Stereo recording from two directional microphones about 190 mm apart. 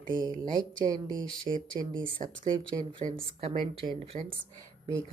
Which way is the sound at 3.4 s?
30° right (ahead or behind).